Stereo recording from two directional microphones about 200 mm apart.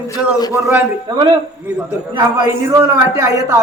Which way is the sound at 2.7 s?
15° right (ahead or behind).